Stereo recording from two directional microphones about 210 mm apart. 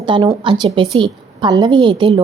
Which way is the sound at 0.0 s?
25° right (ahead or behind).